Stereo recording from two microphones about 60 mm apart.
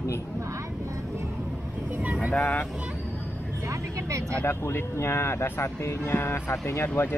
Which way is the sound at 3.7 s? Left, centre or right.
Right.